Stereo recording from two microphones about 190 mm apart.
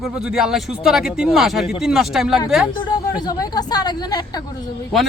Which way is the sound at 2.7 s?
20° left (ahead or behind).